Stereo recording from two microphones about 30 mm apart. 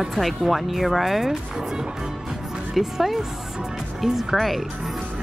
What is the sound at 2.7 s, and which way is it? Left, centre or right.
Speech, centre.